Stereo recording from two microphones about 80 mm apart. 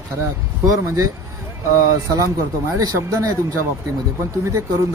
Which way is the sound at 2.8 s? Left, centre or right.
Right.